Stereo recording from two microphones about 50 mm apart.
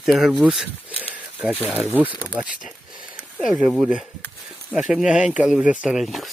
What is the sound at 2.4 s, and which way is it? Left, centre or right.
Speech, centre.